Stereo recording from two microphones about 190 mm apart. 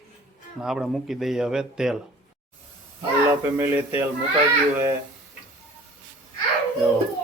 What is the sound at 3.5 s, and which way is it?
Speech, 10° right (ahead or behind).